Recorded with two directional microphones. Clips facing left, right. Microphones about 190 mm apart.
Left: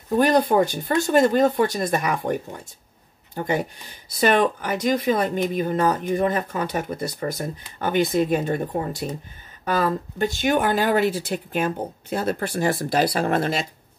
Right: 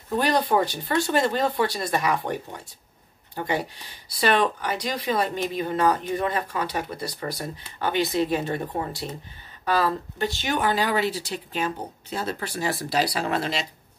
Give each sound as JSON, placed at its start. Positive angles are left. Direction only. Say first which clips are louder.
{"t": 0.2, "sound": "speech", "louder": "left 4 dB", "side_deg": 50}
{"t": 3.5, "sound": "speech", "louder": "left 3 dB", "side_deg": 45}
{"t": 9.7, "sound": "speech", "louder": "left 1 dB", "side_deg": 45}